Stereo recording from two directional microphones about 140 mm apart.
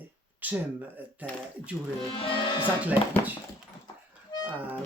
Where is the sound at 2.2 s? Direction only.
35° left (ahead or behind).